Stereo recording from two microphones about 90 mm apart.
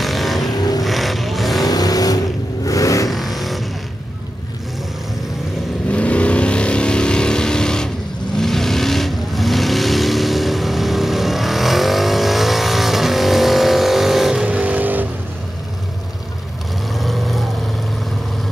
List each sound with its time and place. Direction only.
0.0 s vehicle: centre (ahead or behind)
0.6 s vehicle: 45° left (ahead or behind)
0.8 s vehicle: centre (ahead or behind)
1.7 s vehicle: 45° left (ahead or behind)
3.1 s vehicle: centre (ahead or behind)
5.9 s vehicle: 15° left (ahead or behind); by 15.0 s 20° right (ahead or behind)
16.9 s vehicle: centre (ahead or behind)